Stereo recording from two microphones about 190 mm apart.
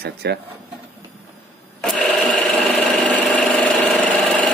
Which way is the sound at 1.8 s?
Centre (ahead or behind).